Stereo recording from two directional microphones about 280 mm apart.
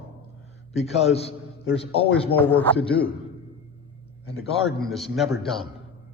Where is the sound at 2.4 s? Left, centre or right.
Centre.